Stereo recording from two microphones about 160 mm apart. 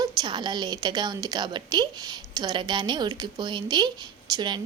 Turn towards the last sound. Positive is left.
turn(degrees=-30)  # may be behind; listen again after turning